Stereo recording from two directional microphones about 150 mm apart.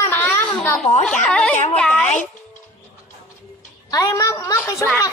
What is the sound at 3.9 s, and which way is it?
Speech, 25° left (ahead or behind).